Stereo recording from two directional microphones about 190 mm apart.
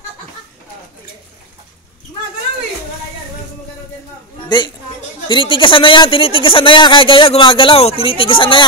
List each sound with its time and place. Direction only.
4.5 s a woman's voice: 25° left (ahead or behind)